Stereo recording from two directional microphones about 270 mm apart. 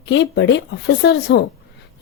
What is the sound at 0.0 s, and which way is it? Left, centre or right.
Speech, left.